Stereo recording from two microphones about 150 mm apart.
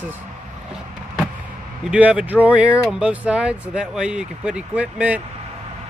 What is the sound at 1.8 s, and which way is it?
Speech, 10° right (ahead or behind).